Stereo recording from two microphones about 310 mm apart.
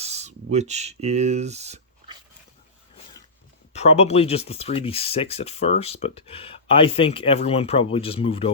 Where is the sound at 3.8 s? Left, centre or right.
Centre.